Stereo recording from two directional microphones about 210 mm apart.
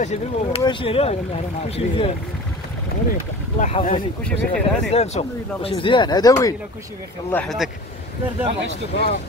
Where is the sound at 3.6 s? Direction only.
35° left (ahead or behind); by 6.6 s 15° left (ahead or behind).